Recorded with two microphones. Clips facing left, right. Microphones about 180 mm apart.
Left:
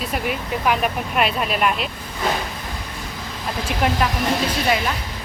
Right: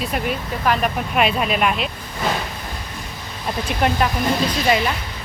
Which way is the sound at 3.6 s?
5° left (ahead or behind).